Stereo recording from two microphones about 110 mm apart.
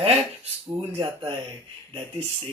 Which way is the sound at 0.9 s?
50° right (ahead or behind).